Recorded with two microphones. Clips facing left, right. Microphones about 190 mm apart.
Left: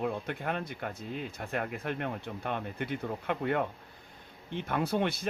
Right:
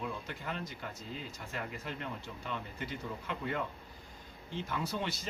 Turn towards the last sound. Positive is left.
turn(degrees=55)  # may be behind; listen again after turning